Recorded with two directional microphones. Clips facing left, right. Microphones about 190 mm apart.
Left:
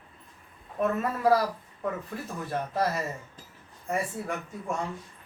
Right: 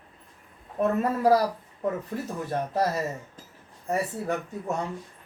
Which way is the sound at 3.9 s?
35° right (ahead or behind).